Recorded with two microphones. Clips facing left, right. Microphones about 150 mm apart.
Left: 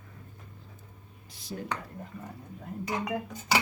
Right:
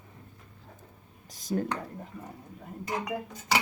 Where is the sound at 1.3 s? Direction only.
45° right (ahead or behind).